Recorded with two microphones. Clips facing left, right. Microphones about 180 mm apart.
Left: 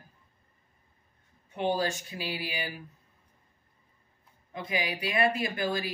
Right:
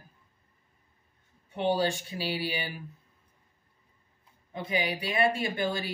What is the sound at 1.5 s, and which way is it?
Speech, 30° right (ahead or behind).